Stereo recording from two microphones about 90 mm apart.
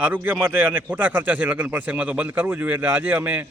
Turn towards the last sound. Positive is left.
turn(degrees=-15)  # may be behind; listen again after turning